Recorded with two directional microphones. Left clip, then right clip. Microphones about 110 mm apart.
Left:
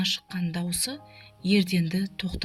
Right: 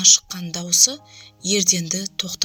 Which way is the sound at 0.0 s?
40° right (ahead or behind).